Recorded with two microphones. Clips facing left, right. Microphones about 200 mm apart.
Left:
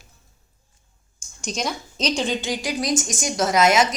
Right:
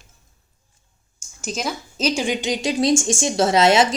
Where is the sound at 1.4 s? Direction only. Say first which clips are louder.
Right 1 dB; 5° right (ahead or behind).